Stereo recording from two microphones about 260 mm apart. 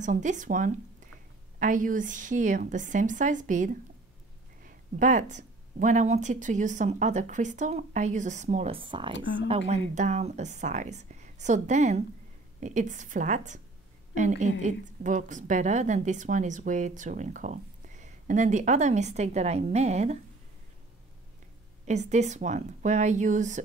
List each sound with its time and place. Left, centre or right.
0.0 s a woman's voice: right
21.8 s a woman's voice: right